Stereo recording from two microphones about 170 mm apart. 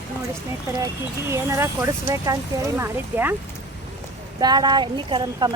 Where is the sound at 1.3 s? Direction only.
15° right (ahead or behind).